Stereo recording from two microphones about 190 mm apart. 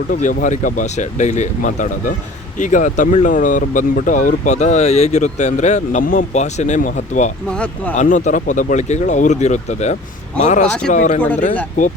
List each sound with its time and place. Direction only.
0.1 s speech: 45° left (ahead or behind)
7.5 s speech: 5° left (ahead or behind)
7.9 s speech: 40° left (ahead or behind)